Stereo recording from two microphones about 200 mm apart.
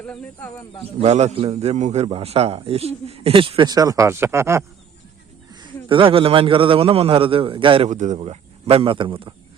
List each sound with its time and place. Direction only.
0.0 s speech: 5° left (ahead or behind)
1.0 s a man's voice: 30° right (ahead or behind)